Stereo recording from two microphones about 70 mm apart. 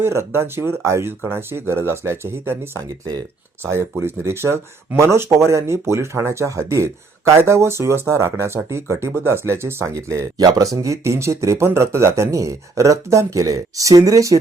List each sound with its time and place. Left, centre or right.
0.0 s speech: right
3.6 s speech: right
9.9 s speech: right
10.3 s speech: right
10.8 s speech: right